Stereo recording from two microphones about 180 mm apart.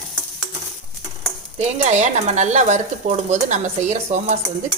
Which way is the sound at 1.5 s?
40° right (ahead or behind).